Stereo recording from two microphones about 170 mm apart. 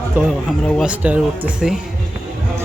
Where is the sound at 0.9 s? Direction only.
10° right (ahead or behind).